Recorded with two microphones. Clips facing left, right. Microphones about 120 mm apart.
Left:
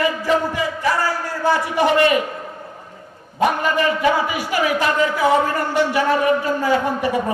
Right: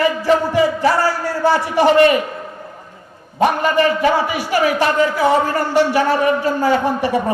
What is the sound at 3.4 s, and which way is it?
A man's voice, 35° right (ahead or behind).